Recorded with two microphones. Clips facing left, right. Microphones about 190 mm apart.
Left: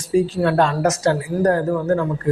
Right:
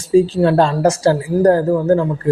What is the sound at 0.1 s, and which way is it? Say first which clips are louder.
Speech: right 5 dB; 30° right (ahead or behind).